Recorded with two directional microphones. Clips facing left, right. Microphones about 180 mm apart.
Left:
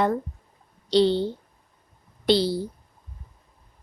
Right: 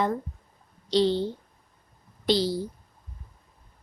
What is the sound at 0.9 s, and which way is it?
A woman's voice, 65° left (ahead or behind).